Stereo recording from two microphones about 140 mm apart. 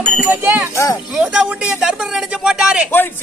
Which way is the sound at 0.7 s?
25° left (ahead or behind).